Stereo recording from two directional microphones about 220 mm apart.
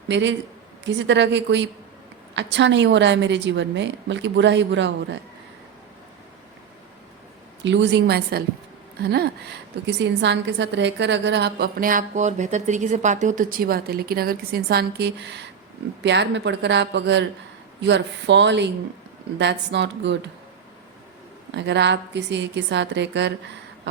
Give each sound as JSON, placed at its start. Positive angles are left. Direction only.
{"t": 0.1, "sound": "a man's voice", "side_deg": -55}
{"t": 7.6, "sound": "a woman's voice", "side_deg": -55}
{"t": 21.5, "sound": "a woman's voice", "side_deg": -50}